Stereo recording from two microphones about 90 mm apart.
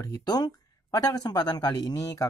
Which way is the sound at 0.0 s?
45° left (ahead or behind).